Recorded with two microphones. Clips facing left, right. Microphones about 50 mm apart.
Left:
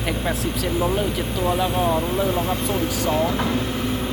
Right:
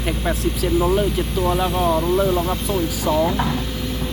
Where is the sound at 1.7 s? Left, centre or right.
Centre.